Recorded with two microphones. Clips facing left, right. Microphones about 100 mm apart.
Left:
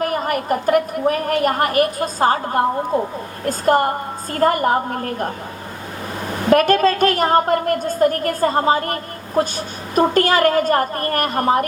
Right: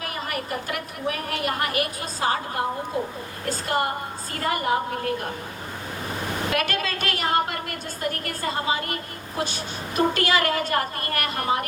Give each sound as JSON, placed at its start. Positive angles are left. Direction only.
{"t": 0.0, "sound": "a woman's voice", "side_deg": 45}
{"t": 6.5, "sound": "a woman's voice", "side_deg": 40}